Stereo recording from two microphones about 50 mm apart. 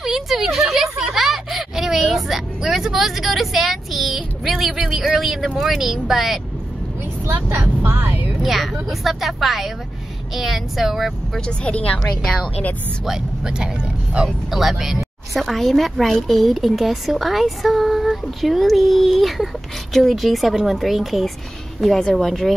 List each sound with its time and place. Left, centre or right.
0.0 s a sound: centre
5.6 s speech: centre
7.8 s speech: right
8.4 s speech: centre
11.6 s a woman's voice: left
13.0 s speech: centre
14.5 s speech: centre